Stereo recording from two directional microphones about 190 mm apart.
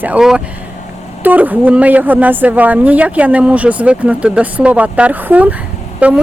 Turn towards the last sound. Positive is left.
turn(degrees=-5)  # may be behind; listen again after turning